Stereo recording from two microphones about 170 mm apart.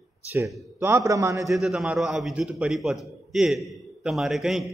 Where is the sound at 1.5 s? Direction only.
Centre (ahead or behind).